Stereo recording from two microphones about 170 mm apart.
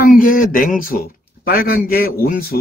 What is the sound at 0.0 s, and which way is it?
A man's voice, 55° left (ahead or behind).